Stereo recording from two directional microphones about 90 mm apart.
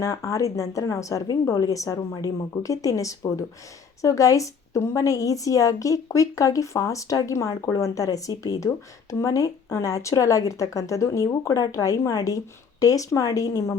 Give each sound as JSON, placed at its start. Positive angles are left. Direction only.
{"t": 0.0, "sound": "a woman's voice", "side_deg": 35}